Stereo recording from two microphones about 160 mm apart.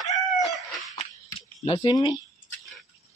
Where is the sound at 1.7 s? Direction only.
25° left (ahead or behind).